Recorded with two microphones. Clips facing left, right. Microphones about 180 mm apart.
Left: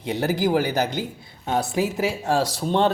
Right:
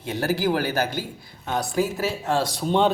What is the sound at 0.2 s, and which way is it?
Speech, 15° left (ahead or behind).